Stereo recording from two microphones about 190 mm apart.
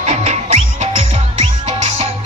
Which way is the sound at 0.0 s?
35° right (ahead or behind).